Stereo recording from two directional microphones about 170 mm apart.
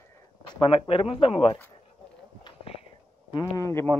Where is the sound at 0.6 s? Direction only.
30° left (ahead or behind).